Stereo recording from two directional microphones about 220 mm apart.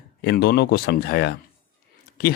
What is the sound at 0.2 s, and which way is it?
Speech, 50° left (ahead or behind).